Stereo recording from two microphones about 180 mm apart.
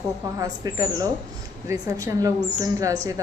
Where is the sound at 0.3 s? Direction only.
20° right (ahead or behind).